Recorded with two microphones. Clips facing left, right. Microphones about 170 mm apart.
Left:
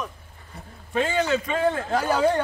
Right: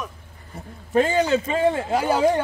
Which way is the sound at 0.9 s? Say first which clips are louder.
Right 4 dB; 35° right (ahead or behind).